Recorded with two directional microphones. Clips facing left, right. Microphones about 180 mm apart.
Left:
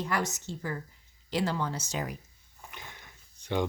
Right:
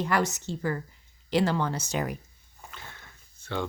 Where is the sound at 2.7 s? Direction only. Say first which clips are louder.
Even; 15° left (ahead or behind).